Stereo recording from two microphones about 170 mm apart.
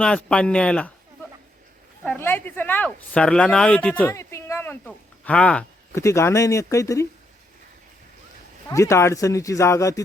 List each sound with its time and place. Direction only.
0.0 s speech: 5° left (ahead or behind)
5.9 s speech: 15° left (ahead or behind)
8.7 s speech: 20° left (ahead or behind)